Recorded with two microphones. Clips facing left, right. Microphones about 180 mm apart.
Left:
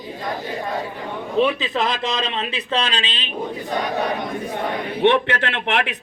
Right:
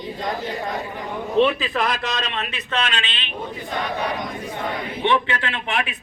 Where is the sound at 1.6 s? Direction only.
25° left (ahead or behind).